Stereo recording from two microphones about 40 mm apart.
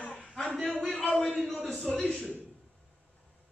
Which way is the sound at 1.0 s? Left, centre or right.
Centre.